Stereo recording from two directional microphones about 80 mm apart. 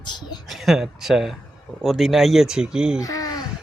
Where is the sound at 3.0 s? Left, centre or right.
Left.